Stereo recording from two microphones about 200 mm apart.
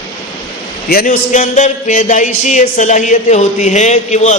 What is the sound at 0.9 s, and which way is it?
A man's voice, 45° left (ahead or behind).